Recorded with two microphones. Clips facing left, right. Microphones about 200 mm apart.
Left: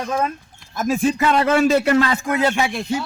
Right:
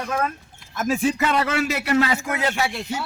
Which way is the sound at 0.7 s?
40° left (ahead or behind).